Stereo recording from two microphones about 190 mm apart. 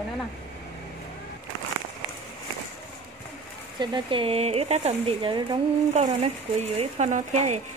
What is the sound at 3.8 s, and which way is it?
Speech, 25° right (ahead or behind).